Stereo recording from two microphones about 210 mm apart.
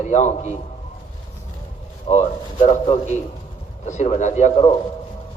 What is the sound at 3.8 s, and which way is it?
Speech, 35° left (ahead or behind).